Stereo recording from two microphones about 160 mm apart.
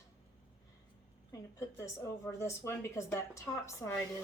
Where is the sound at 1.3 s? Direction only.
20° left (ahead or behind).